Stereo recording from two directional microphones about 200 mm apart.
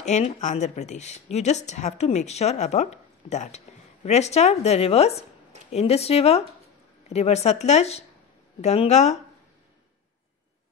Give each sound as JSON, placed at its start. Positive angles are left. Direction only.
{"t": 0.0, "sound": "speech", "side_deg": 35}